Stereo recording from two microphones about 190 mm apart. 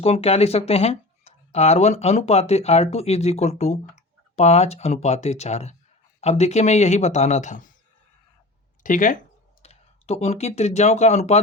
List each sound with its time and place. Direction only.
0.0 s speech: 35° left (ahead or behind)
8.8 s speech: 40° left (ahead or behind)